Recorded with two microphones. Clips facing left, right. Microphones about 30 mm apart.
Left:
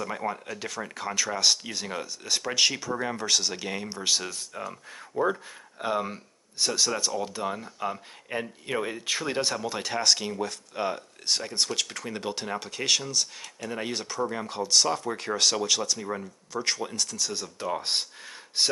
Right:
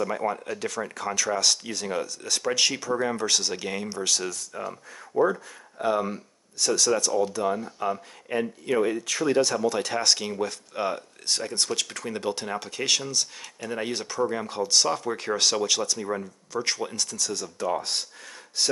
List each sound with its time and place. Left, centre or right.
0.0 s speech: centre
3.9 s speech: centre
8.7 s speech: centre
17.3 s speech: centre